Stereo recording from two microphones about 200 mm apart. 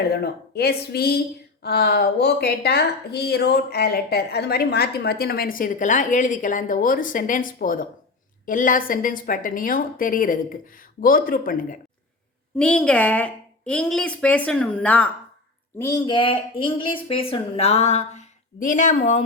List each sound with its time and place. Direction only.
0.1 s speech: 55° left (ahead or behind)
12.5 s a woman's voice: 5° left (ahead or behind)
15.8 s speech: 20° left (ahead or behind); by 19.2 s 35° left (ahead or behind)